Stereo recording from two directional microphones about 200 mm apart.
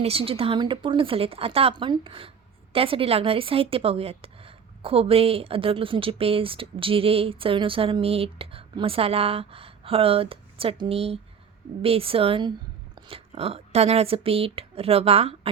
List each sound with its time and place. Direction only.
0.0 s a woman's voice: 30° right (ahead or behind)